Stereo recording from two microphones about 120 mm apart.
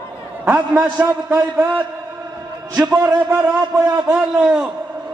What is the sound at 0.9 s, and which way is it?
Speech, 15° right (ahead or behind).